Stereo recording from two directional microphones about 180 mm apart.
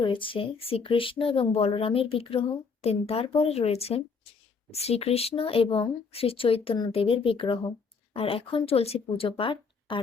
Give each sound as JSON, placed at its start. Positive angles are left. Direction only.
{"t": 0.0, "sound": "speech", "side_deg": 30}